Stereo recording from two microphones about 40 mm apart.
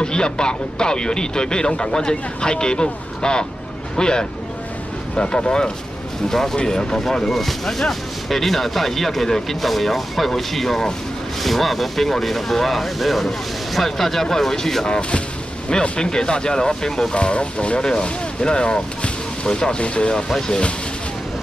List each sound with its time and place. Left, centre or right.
0.0 s speech: left
15.0 s speech: left
17.1 s speech: left